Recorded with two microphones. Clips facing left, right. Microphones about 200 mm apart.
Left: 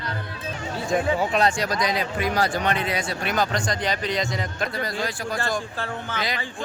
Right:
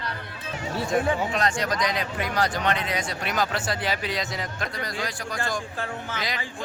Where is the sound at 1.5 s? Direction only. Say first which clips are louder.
Left 2 dB; 10° left (ahead or behind).